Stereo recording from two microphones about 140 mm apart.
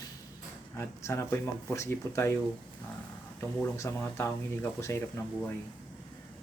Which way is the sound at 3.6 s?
20° left (ahead or behind).